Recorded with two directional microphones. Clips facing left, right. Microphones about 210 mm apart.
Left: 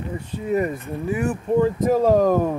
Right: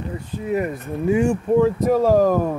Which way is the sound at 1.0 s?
25° right (ahead or behind).